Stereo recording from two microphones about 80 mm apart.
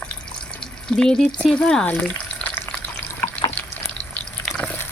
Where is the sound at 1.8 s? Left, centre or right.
Centre.